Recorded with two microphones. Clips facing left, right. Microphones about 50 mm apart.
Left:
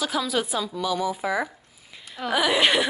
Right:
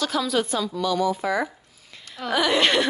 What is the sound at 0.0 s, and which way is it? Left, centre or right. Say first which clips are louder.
A woman's voice: right 2 dB; centre.